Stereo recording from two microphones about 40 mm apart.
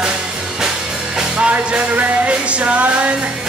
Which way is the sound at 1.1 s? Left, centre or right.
Right.